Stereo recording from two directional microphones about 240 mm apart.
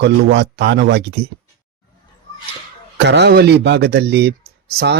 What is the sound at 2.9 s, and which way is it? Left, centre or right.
Speech, right.